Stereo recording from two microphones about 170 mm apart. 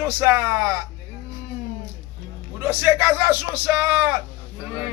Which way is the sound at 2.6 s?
10° right (ahead or behind).